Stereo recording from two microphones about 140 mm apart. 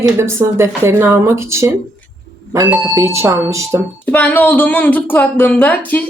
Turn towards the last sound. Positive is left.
turn(degrees=10)  # may be behind; listen again after turning